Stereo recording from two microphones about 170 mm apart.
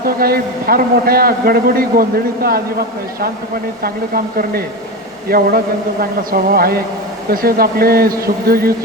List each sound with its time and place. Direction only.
0.0 s a man's voice: 60° right (ahead or behind)
3.8 s a man's voice: 60° right (ahead or behind)